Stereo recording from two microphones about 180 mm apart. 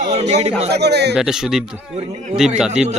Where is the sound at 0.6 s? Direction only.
65° right (ahead or behind).